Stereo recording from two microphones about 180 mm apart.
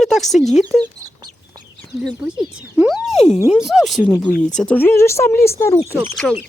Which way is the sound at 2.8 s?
5° right (ahead or behind).